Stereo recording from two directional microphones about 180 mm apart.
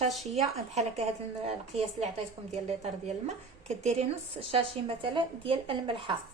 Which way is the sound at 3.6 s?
40° right (ahead or behind).